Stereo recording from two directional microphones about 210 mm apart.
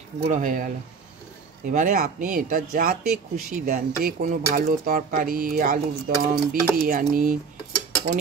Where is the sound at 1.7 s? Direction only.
40° right (ahead or behind).